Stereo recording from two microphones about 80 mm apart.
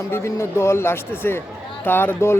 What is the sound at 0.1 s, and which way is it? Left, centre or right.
Speech, left.